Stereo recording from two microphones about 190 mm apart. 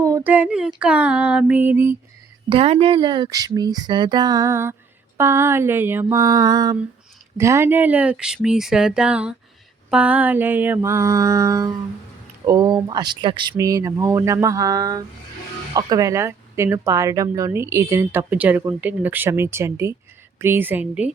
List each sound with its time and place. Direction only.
0.0 s speech: 15° right (ahead or behind)
2.5 s speech: 30° right (ahead or behind); by 21.1 s 10° right (ahead or behind)